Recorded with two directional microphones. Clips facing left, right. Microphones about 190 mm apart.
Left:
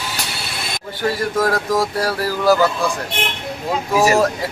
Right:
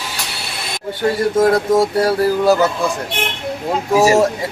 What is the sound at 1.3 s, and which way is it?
Speech, 25° right (ahead or behind).